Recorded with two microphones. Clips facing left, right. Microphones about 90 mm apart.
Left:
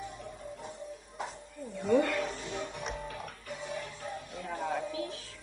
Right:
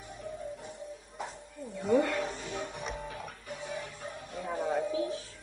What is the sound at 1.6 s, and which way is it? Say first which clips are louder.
Wild animals: even; centre (ahead or behind).